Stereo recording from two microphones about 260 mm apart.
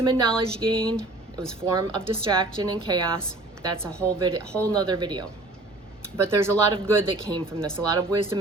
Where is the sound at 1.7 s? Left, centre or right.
Centre.